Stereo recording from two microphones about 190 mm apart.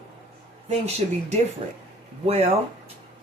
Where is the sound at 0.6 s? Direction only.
35° right (ahead or behind).